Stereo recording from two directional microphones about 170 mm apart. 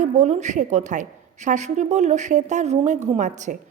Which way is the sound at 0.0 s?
45° right (ahead or behind).